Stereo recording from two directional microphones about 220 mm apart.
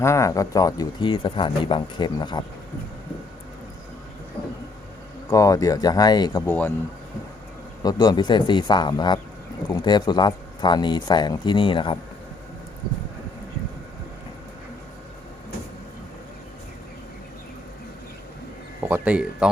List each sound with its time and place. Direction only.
0.0 s speech: 15° left (ahead or behind)
5.3 s speech: 15° left (ahead or behind)
7.8 s speech: 20° left (ahead or behind)
18.9 s speech: 5° right (ahead or behind)